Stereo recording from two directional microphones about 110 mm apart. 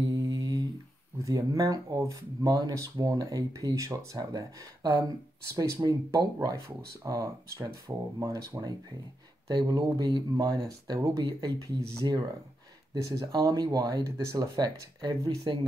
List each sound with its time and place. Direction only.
0.1 s mantra: 35° right (ahead or behind)
1.2 s speech: 30° right (ahead or behind)
12.9 s speech: 30° right (ahead or behind)